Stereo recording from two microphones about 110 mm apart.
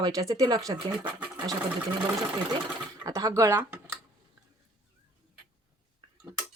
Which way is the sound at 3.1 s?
30° right (ahead or behind).